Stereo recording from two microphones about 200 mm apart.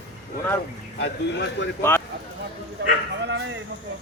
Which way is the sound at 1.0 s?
60° left (ahead or behind).